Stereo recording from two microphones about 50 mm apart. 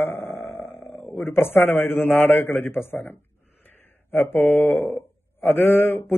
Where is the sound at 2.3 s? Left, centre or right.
Left.